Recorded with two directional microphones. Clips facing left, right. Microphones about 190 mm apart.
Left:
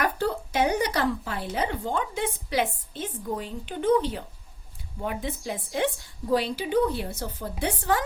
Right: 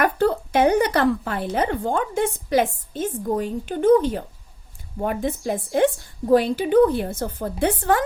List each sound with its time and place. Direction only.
0.0 s a woman's voice: 55° right (ahead or behind)